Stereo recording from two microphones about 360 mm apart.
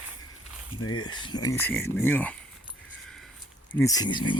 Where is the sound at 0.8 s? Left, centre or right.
Left.